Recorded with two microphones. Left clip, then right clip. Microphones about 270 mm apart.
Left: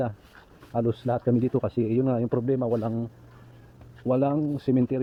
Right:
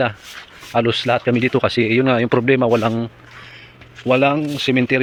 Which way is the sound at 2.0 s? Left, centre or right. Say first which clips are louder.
Right 10 dB; left.